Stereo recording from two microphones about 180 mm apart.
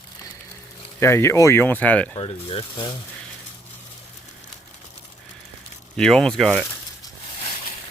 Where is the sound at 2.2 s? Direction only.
30° left (ahead or behind).